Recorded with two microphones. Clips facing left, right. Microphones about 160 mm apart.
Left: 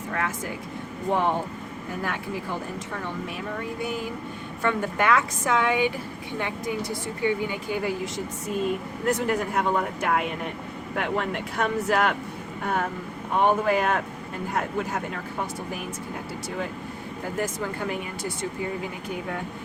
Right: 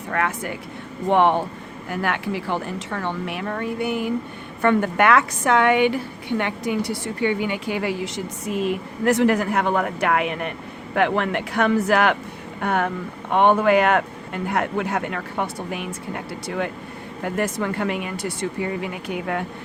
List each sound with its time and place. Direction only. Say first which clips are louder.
0.1 s speech: right 5 dB; 65° right (ahead or behind)
1.1 s a woman's voice: right 7 dB; 80° right